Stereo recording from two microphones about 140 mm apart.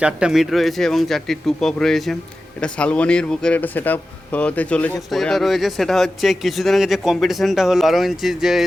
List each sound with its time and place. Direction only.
0.0 s a man's voice: 5° right (ahead or behind)